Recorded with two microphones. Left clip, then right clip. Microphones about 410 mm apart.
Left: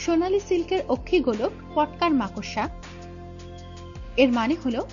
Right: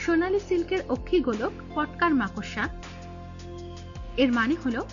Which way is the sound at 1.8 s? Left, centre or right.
Centre.